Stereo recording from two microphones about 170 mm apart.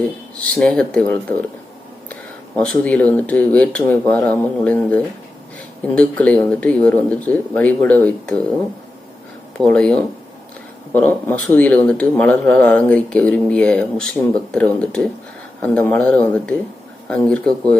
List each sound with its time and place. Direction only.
0.3 s speech: 5° left (ahead or behind)
2.6 s speech: 5° left (ahead or behind)
9.6 s speech: 5° left (ahead or behind)